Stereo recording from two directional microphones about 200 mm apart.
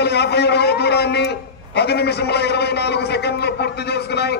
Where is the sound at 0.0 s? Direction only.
55° left (ahead or behind).